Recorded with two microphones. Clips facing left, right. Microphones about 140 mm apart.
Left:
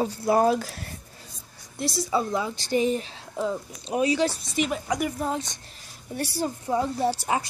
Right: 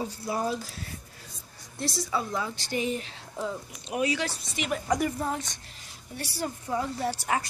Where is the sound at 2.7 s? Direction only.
35° left (ahead or behind).